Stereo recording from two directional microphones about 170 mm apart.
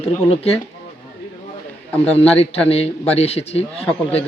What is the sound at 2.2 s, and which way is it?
Speech, 35° left (ahead or behind).